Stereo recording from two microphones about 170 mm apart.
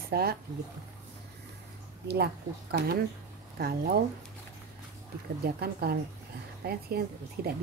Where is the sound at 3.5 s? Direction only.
70° right (ahead or behind).